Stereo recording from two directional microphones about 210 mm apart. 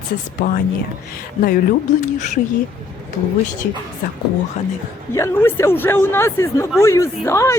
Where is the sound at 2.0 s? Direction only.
35° left (ahead or behind).